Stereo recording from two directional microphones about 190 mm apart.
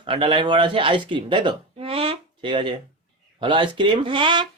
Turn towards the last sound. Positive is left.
turn(degrees=-25)  # may be behind; listen again after turning